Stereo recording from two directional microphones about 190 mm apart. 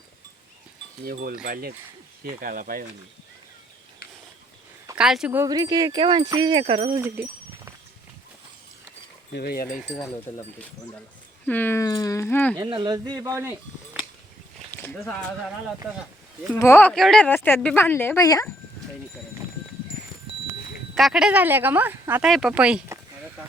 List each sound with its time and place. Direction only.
1.0 s speech: 50° right (ahead or behind)
4.9 s speech: 5° right (ahead or behind)
5.5 s speech: 20° right (ahead or behind)
7.0 s a sound: 10° right (ahead or behind)
9.3 s speech: 55° left (ahead or behind)
9.9 s speech: 5° left (ahead or behind)
11.4 s speech: 10° left (ahead or behind)
12.5 s speech: 25° right (ahead or behind)
14.7 s a sound: 10° left (ahead or behind)
16.6 s speech: 10° left (ahead or behind)
20.9 s speech: centre (ahead or behind)